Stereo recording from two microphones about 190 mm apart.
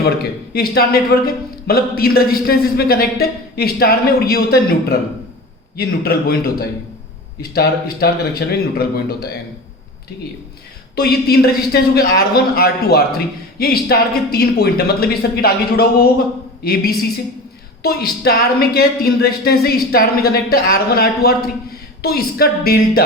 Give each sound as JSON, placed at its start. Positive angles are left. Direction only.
{"t": 0.0, "sound": "a man's voice", "side_deg": 55}
{"t": 10.9, "sound": "a man's voice", "side_deg": 55}